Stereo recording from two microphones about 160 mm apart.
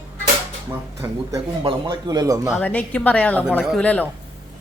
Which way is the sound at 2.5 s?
10° left (ahead or behind).